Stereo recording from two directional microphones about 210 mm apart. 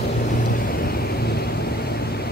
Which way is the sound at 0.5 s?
45° left (ahead or behind).